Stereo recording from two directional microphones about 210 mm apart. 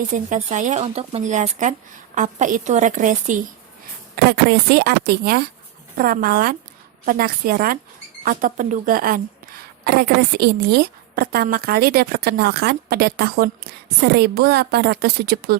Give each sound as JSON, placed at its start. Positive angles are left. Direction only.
{"t": 0.1, "sound": "speech", "side_deg": -35}
{"t": 4.3, "sound": "a woman's voice", "side_deg": -50}